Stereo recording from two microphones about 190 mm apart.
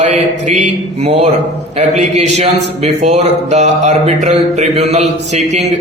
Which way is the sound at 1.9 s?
35° right (ahead or behind).